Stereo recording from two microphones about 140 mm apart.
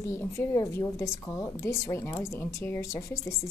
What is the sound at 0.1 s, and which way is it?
Speech, 20° left (ahead or behind).